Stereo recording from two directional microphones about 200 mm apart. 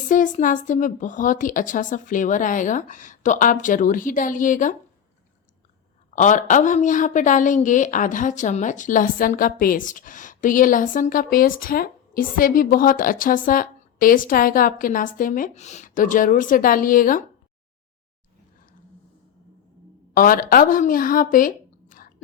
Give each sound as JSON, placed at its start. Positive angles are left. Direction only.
{"t": 0.1, "sound": "a woman's voice", "side_deg": 40}
{"t": 6.1, "sound": "a woman's voice", "side_deg": 40}
{"t": 20.1, "sound": "speech", "side_deg": 45}